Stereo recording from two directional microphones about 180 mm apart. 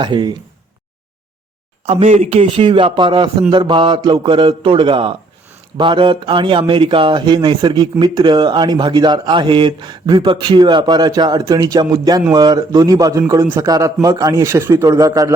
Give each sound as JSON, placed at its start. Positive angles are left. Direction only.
{"t": 0.0, "sound": "a man's voice", "side_deg": -25}
{"t": 1.9, "sound": "a man's voice", "side_deg": -35}